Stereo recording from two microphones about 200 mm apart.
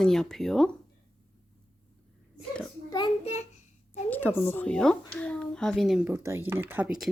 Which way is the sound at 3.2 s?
30° left (ahead or behind).